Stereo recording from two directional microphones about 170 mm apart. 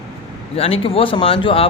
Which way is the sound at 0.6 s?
35° left (ahead or behind).